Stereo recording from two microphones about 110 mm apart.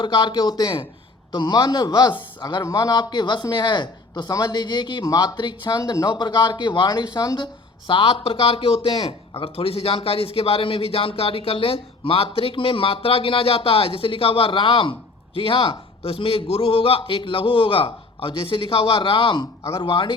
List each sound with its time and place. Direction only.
0.0 s a man's voice: 50° left (ahead or behind); by 6.1 s 30° left (ahead or behind)
6.1 s a man's voice: 45° left (ahead or behind)